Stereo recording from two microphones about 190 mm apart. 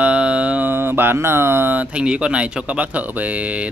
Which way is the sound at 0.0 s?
5° right (ahead or behind).